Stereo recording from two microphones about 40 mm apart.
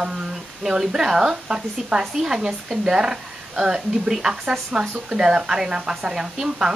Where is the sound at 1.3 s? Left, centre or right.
Right.